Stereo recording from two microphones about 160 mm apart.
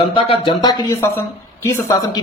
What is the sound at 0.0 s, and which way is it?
A man's voice, 30° left (ahead or behind).